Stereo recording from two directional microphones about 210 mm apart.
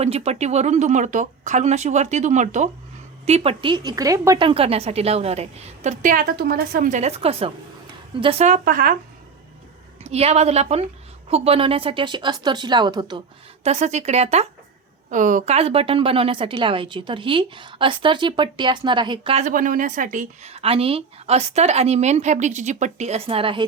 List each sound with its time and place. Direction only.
0.0 s a woman's voice: 30° right (ahead or behind)
4.4 s a woman's voice: 25° right (ahead or behind); by 9.0 s 45° right (ahead or behind)
10.0 s speech: 30° right (ahead or behind)
13.7 s a woman's voice: 30° right (ahead or behind)